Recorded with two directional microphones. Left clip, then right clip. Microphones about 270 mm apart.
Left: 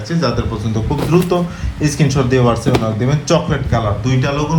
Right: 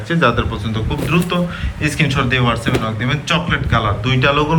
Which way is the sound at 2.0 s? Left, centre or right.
Centre.